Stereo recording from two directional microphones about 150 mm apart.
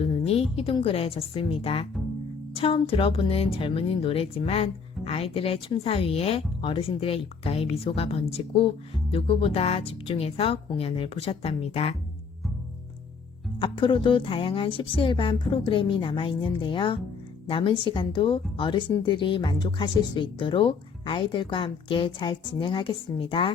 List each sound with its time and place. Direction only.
0.0 s a woman's voice: 40° left (ahead or behind)
13.6 s speech: 35° left (ahead or behind)